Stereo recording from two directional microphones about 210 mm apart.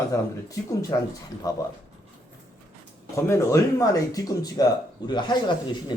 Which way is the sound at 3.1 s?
15° left (ahead or behind).